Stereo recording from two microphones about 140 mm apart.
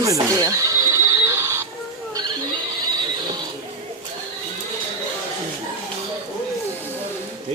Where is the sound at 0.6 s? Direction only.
25° right (ahead or behind).